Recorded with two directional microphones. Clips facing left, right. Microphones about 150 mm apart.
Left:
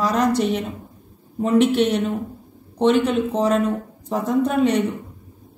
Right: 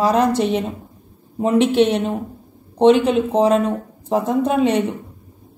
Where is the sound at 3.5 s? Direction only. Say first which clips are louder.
Right 2 dB; 30° right (ahead or behind).